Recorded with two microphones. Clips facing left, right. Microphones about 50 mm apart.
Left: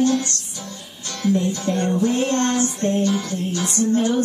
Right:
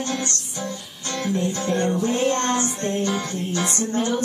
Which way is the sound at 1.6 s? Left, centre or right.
Right.